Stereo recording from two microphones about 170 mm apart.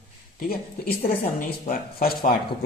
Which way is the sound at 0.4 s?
65° left (ahead or behind).